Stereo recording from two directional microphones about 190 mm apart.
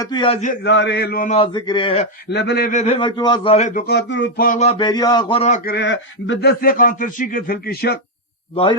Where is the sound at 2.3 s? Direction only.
60° left (ahead or behind).